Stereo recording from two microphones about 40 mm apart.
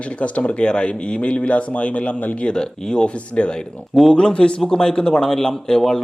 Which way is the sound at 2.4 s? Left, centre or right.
Centre.